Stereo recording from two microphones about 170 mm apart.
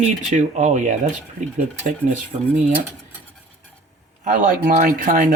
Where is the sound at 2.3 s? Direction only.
40° right (ahead or behind).